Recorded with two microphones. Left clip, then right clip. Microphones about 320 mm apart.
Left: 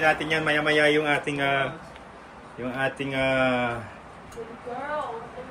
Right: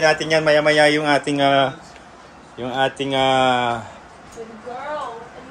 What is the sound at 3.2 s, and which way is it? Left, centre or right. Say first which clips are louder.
Speech: right 7 dB; right.